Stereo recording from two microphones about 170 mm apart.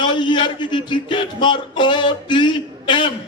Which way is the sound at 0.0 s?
30° left (ahead or behind).